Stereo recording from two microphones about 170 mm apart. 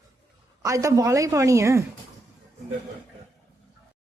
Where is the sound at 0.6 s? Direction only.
20° right (ahead or behind).